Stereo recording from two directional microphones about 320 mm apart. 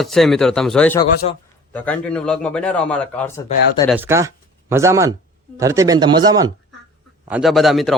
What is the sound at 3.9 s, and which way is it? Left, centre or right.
A man's voice, centre.